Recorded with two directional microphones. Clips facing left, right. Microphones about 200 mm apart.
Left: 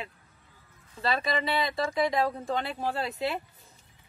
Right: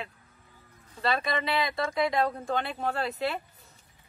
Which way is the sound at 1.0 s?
Centre (ahead or behind).